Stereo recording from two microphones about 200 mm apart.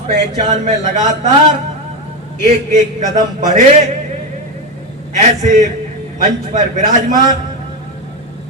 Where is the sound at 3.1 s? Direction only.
40° right (ahead or behind).